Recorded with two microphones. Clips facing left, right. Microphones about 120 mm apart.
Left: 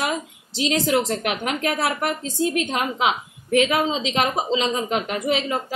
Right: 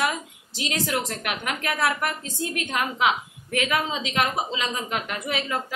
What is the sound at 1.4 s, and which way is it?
A woman's voice, 35° left (ahead or behind).